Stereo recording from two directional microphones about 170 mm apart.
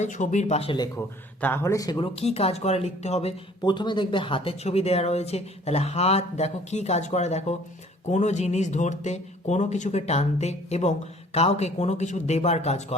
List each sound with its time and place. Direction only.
0.0 s speech: 45° left (ahead or behind)
0.9 s speech: 10° left (ahead or behind)
2.2 s speech: 40° left (ahead or behind)